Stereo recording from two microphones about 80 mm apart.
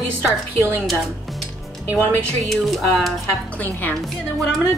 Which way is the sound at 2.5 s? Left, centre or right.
Centre.